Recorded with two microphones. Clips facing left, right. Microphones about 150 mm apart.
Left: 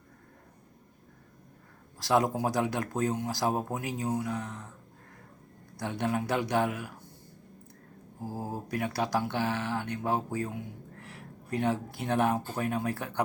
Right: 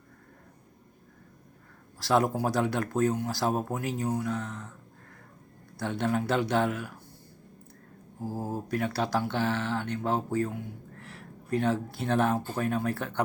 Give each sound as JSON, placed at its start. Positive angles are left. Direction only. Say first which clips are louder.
{"t": 2.0, "sound": "speech", "louder": "right 1 dB", "side_deg": 15}
{"t": 5.7, "sound": "speech", "louder": "right 2 dB", "side_deg": 15}
{"t": 8.2, "sound": "speech", "louder": "right 3 dB", "side_deg": 10}